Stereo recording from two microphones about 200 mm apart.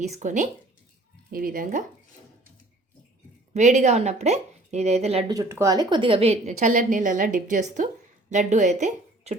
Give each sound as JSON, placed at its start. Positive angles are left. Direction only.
{"t": 0.0, "sound": "a woman's voice", "side_deg": -35}
{"t": 3.5, "sound": "a woman's voice", "side_deg": -35}
{"t": 5.3, "sound": "a woman's voice", "side_deg": -15}